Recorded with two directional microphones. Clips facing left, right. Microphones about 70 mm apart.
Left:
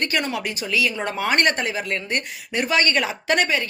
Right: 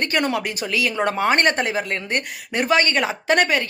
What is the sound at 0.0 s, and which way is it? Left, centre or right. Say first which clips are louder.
Speech: right 3 dB; right.